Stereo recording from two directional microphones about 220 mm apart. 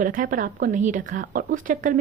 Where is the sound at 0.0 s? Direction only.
40° right (ahead or behind).